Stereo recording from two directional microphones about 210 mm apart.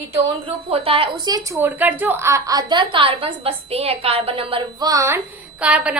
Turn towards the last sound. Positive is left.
turn(degrees=-5)  # may be behind; listen again after turning